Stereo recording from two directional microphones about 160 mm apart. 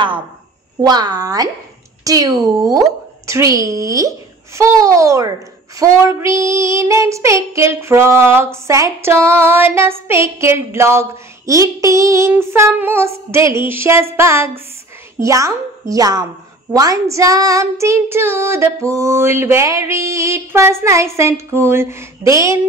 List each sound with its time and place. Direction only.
0.7 s a woman's voice: 25° right (ahead or behind)
5.8 s child singing: 15° right (ahead or behind)
15.1 s a woman's voice: 20° right (ahead or behind)
16.7 s child singing: 20° right (ahead or behind)